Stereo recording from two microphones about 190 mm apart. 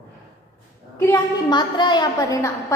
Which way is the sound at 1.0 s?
20° left (ahead or behind).